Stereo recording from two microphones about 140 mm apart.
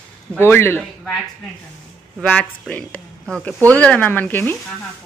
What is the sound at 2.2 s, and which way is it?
Speech, 10° left (ahead or behind).